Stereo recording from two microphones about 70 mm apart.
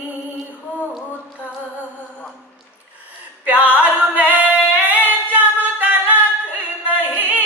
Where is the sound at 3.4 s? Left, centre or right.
Right.